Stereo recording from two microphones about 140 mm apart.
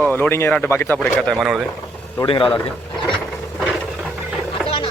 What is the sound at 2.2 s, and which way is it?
Speech, 40° left (ahead or behind).